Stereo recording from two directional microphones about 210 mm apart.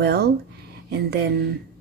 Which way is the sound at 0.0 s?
50° right (ahead or behind).